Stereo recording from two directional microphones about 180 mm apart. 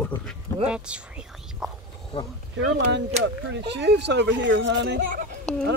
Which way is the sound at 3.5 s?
70° right (ahead or behind).